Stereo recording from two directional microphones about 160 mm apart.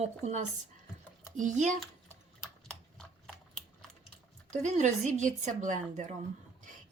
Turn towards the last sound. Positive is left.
turn(degrees=-50)  # may be behind; listen again after turning